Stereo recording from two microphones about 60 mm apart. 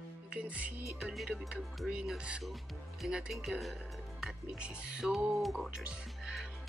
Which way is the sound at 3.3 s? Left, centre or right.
Centre.